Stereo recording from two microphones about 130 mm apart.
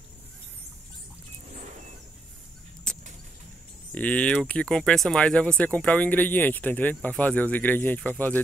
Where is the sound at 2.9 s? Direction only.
5° left (ahead or behind).